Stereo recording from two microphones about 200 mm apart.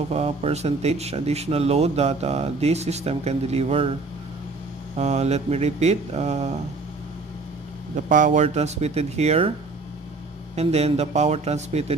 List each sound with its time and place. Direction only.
0.1 s speech: 30° right (ahead or behind)
4.9 s speech: 35° right (ahead or behind)
7.9 s speech: 40° right (ahead or behind)
10.5 s speech: 30° right (ahead or behind)